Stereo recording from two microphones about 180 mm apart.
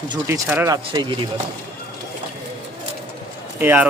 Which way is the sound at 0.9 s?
25° right (ahead or behind).